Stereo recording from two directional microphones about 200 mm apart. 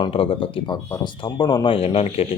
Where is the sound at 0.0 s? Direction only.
25° left (ahead or behind).